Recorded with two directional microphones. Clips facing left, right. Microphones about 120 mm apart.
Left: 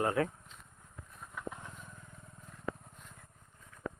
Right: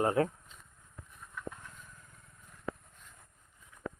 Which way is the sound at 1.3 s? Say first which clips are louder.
Left 1 dB; 20° left (ahead or behind).